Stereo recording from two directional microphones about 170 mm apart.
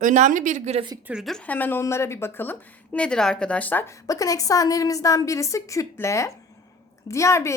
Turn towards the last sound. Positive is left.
turn(degrees=15)  # may be behind; listen again after turning